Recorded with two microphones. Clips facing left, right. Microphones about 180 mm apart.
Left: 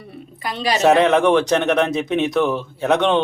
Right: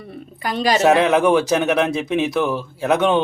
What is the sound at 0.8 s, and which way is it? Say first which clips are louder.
A man's voice: left 2 dB; centre (ahead or behind).